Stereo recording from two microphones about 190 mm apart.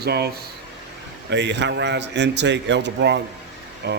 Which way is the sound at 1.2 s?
65° right (ahead or behind).